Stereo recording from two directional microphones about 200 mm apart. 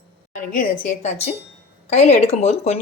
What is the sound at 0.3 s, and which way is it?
Speech, 45° left (ahead or behind).